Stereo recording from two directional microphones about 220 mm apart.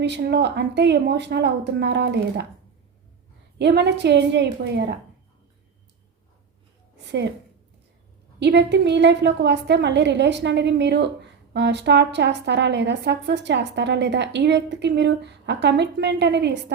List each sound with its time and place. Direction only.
0.0 s speech: 50° right (ahead or behind)
3.6 s speech: 50° right (ahead or behind)
8.4 s speech: 50° right (ahead or behind)